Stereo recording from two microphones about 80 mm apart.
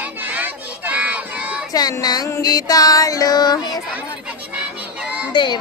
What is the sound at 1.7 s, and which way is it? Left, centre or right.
Child singing, left.